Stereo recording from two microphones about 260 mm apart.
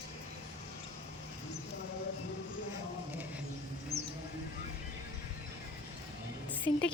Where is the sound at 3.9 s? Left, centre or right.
Right.